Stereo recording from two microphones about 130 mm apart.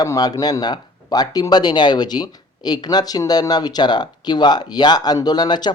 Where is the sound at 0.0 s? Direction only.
30° left (ahead or behind).